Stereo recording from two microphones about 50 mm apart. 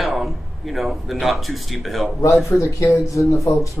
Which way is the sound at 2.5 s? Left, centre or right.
Left.